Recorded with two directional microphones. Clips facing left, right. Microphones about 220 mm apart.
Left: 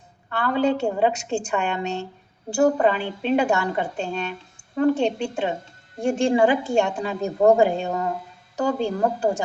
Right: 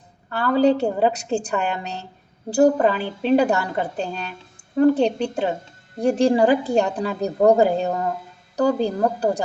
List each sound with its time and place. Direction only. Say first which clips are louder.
0.3 s a woman's voice: right 4 dB; 35° right (ahead or behind)